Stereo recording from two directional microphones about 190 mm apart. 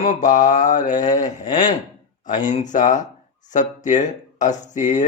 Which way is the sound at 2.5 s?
40° left (ahead or behind).